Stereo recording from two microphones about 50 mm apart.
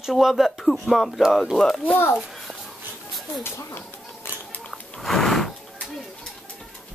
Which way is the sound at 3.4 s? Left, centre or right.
Left.